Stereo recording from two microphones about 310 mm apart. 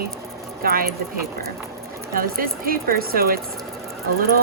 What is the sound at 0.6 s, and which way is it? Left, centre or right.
Speech, right.